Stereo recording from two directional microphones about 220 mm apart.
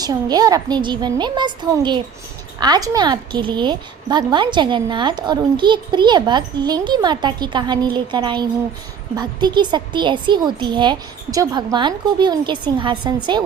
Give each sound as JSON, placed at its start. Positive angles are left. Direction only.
{"t": 0.0, "sound": "a woman's voice", "side_deg": -20}